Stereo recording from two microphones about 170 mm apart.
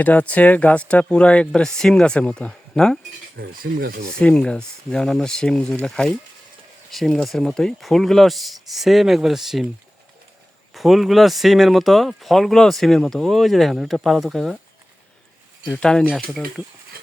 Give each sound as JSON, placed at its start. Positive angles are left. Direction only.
{"t": 0.0, "sound": "speech", "side_deg": 10}
{"t": 3.3, "sound": "speech", "side_deg": -60}
{"t": 4.2, "sound": "speech", "side_deg": 5}
{"t": 10.8, "sound": "speech", "side_deg": 0}
{"t": 15.7, "sound": "speech", "side_deg": 5}